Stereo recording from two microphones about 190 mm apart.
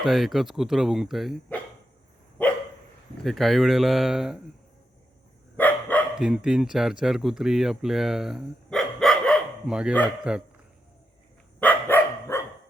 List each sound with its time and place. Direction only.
0.0 s speech: centre (ahead or behind)
3.2 s speech: centre (ahead or behind)
5.5 s dog: 10° left (ahead or behind)
6.1 s speech: 5° right (ahead or behind)
11.6 s dog: 10° left (ahead or behind)